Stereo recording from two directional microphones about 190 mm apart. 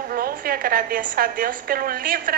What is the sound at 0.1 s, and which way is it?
A woman's voice, 50° right (ahead or behind).